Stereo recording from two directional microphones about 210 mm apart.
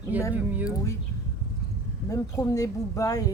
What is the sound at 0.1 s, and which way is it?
Speech, 10° right (ahead or behind).